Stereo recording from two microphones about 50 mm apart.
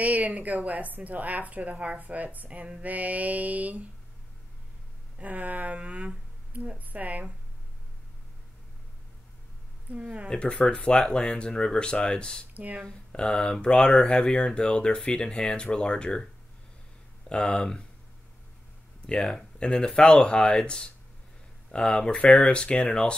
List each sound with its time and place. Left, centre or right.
0.0 s speech: right
5.2 s speech: right
9.8 s speech: right
10.3 s speech: centre
12.5 s speech: right
12.8 s speech: centre
17.3 s speech: centre
19.0 s speech: centre